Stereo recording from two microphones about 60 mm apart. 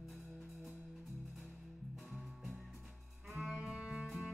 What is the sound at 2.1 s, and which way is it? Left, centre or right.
Music, centre.